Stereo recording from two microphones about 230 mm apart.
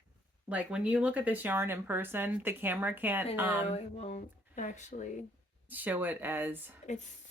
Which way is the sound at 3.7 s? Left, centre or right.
Left.